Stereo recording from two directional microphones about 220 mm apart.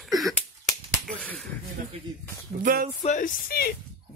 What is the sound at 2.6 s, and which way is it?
Speech, 40° right (ahead or behind).